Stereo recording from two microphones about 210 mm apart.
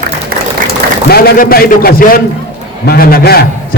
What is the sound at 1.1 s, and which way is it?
A man's voice, 45° left (ahead or behind).